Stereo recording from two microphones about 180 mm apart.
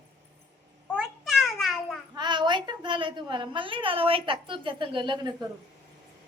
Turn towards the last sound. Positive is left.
turn(degrees=-25)  # may be behind; listen again after turning